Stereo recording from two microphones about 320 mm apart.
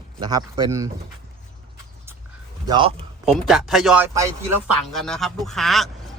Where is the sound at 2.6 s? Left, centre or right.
Centre.